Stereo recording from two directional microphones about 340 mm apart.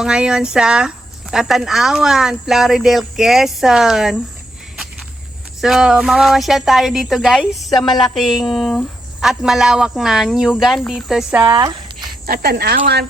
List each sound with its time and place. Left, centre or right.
0.0 s speech: centre
5.5 s speech: centre
12.2 s speech: right